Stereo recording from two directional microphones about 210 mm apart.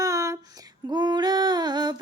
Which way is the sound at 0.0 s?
15° right (ahead or behind).